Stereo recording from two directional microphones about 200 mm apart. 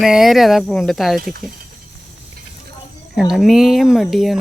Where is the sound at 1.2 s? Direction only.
45° right (ahead or behind).